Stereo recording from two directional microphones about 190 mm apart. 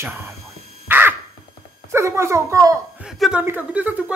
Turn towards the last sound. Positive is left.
turn(degrees=-10)  # may be behind; listen again after turning